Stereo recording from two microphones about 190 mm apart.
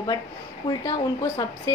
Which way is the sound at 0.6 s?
20° left (ahead or behind).